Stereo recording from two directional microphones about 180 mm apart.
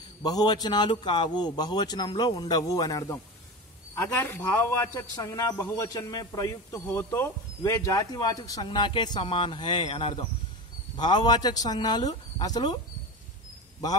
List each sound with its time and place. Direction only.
0.2 s a man's voice: 20° left (ahead or behind)